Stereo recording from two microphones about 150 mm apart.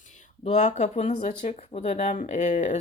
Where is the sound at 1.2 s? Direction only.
60° left (ahead or behind).